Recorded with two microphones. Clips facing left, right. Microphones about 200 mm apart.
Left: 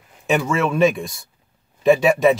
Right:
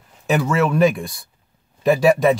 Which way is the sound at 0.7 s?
Centre (ahead or behind).